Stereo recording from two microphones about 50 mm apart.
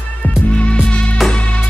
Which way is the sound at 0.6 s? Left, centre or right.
Left.